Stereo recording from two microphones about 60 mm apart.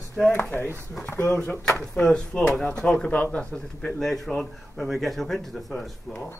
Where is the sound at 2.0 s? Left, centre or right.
Centre.